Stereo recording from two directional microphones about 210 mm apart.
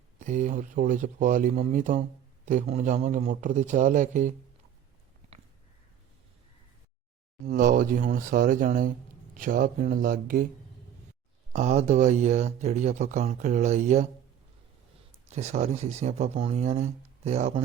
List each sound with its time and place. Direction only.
0.2 s speech: 35° right (ahead or behind)
7.4 s speech: 40° right (ahead or behind)
11.5 s speech: 35° right (ahead or behind)
15.3 s speech: 30° right (ahead or behind)